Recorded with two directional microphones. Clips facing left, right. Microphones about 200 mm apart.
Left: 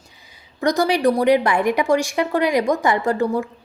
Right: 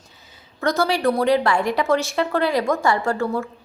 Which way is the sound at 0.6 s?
15° left (ahead or behind).